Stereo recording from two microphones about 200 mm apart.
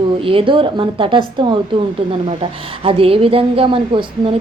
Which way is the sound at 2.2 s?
25° right (ahead or behind).